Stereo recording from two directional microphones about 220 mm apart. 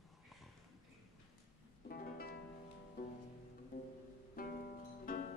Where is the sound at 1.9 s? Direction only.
45° left (ahead or behind).